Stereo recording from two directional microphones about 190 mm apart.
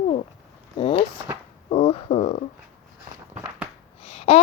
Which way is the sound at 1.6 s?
30° left (ahead or behind).